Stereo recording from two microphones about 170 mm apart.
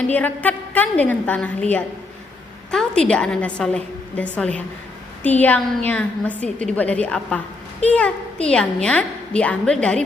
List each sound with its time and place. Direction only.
0.1 s a woman's voice: 10° left (ahead or behind)